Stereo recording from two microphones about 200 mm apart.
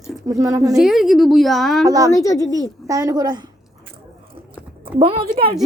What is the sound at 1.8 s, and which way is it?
Speech, 20° right (ahead or behind).